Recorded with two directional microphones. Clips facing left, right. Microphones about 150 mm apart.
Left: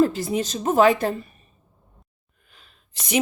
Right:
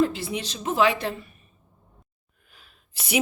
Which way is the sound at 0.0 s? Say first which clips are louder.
Left 4 dB; 40° left (ahead or behind).